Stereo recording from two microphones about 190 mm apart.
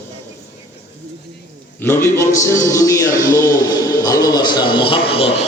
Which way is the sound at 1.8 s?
15° left (ahead or behind).